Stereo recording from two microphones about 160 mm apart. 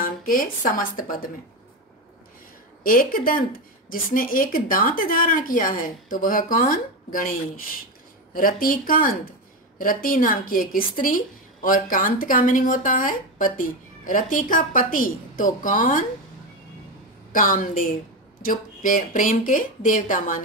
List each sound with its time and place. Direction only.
0.0 s a woman's voice: 60° left (ahead or behind)
2.8 s a woman's voice: 60° left (ahead or behind)
17.3 s a woman's voice: 55° left (ahead or behind)